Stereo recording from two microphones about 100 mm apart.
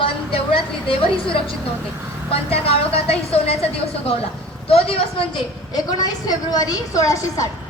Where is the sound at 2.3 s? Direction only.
80° left.